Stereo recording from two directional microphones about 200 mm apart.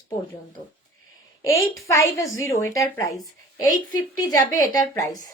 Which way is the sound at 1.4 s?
15° left (ahead or behind).